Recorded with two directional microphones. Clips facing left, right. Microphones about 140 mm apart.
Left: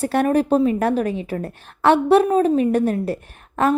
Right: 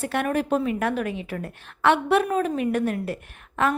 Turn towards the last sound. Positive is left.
turn(degrees=35)  # may be behind; listen again after turning